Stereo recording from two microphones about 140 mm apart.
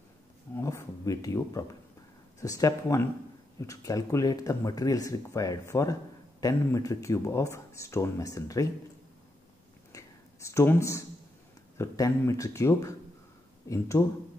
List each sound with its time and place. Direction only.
0.6 s speech: 20° left (ahead or behind)
9.9 s a sound: 20° left (ahead or behind)
11.7 s speech: 20° left (ahead or behind)